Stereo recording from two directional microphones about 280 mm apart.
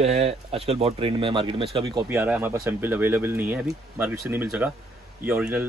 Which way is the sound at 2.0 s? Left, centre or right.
Centre.